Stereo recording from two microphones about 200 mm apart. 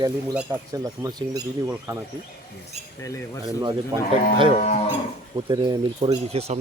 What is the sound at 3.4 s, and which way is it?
Speech, 20° right (ahead or behind).